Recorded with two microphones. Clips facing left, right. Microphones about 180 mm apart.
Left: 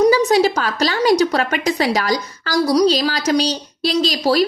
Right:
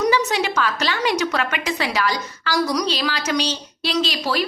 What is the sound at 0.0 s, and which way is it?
A woman's voice, 35° left (ahead or behind).